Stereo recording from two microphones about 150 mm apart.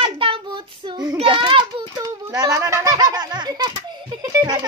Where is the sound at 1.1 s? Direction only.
35° right (ahead or behind).